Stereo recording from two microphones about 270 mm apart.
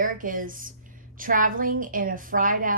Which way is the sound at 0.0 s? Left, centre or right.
Right.